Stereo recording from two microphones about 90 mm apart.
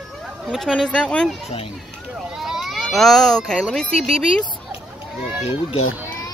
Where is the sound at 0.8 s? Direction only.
10° left (ahead or behind).